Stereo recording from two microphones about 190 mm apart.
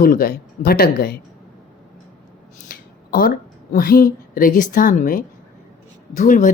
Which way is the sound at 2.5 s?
50° left (ahead or behind).